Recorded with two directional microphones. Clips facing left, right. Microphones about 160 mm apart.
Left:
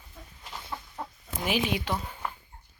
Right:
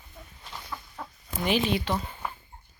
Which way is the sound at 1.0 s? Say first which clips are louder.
Left 4 dB; 20° left (ahead or behind).